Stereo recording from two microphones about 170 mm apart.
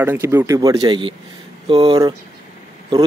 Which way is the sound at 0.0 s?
15° right (ahead or behind).